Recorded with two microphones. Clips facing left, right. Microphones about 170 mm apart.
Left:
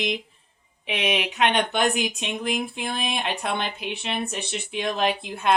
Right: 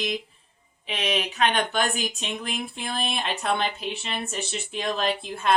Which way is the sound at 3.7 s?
65° left (ahead or behind).